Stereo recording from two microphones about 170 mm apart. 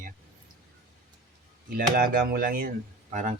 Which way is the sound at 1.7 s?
60° right (ahead or behind).